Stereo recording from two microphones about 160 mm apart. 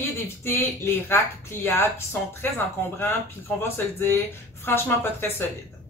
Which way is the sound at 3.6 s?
15° left (ahead or behind).